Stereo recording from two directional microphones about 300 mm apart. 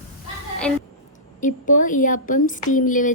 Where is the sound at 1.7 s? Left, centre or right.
Left.